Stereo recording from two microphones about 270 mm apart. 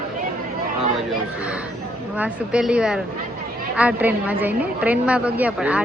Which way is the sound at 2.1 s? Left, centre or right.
Centre.